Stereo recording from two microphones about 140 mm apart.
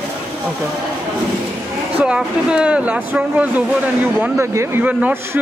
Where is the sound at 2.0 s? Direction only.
5° right (ahead or behind).